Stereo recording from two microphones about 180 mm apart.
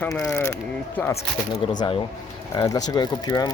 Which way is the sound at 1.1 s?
35° left (ahead or behind).